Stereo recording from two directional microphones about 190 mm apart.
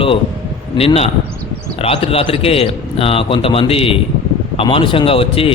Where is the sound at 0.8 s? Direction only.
30° left (ahead or behind).